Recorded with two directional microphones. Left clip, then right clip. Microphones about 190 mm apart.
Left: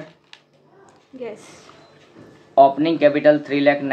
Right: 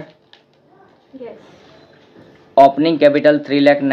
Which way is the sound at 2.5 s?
50° right (ahead or behind).